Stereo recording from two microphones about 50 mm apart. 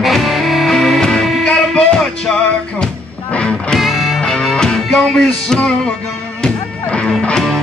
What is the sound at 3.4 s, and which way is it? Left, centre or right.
Music, left.